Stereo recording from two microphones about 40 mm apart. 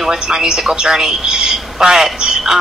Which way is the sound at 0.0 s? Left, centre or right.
Centre.